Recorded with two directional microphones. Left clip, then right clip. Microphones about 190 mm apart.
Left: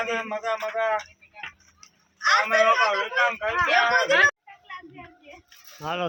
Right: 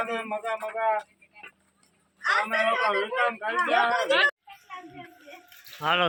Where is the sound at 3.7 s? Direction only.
30° left (ahead or behind).